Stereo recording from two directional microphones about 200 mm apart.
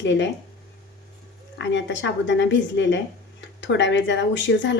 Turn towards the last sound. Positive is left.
turn(degrees=65)  # may be behind; listen again after turning